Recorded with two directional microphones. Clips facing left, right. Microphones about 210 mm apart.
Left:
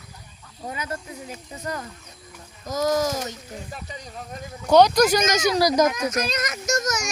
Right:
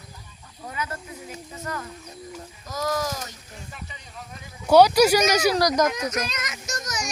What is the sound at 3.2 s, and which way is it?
A child's voice, 40° left (ahead or behind).